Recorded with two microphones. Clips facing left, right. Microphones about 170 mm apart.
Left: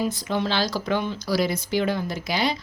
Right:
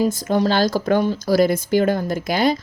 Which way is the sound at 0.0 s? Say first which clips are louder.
Right 7 dB; 45° right (ahead or behind).